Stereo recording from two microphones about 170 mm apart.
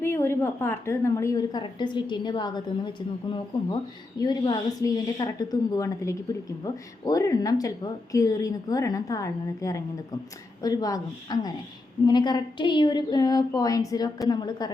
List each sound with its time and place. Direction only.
0.0 s a woman's voice: 15° left (ahead or behind)